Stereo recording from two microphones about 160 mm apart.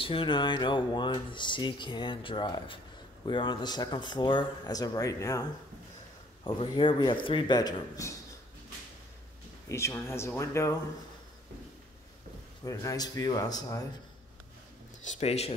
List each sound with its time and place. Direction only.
0.0 s speech: 35° left (ahead or behind)
6.4 s speech: 30° left (ahead or behind)
9.7 s speech: 15° left (ahead or behind)
12.6 s speech: 20° left (ahead or behind)
15.0 s speech: 40° left (ahead or behind)